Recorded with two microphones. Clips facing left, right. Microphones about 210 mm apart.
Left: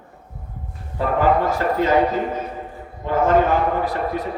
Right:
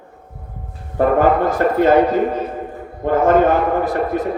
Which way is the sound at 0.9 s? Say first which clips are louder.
Right 4 dB; 50° right (ahead or behind).